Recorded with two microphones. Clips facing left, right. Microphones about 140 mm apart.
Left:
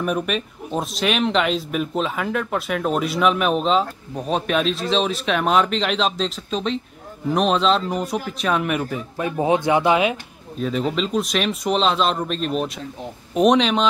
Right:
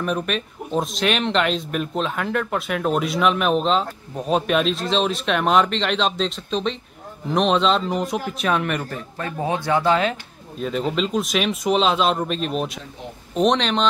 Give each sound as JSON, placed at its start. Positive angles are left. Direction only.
{"t": 0.0, "sound": "speech", "side_deg": 5}
{"t": 10.6, "sound": "speech", "side_deg": 0}